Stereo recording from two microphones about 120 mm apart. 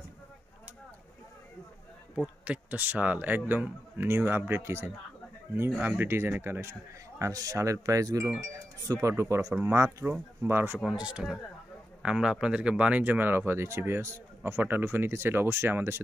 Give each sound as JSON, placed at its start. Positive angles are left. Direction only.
{"t": 2.1, "sound": "a man's voice", "side_deg": -10}
{"t": 10.8, "sound": "a man's voice", "side_deg": -5}